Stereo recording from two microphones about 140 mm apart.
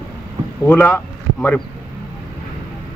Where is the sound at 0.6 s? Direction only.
15° left (ahead or behind).